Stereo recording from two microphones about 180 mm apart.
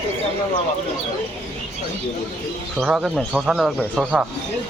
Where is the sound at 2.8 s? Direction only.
5° right (ahead or behind).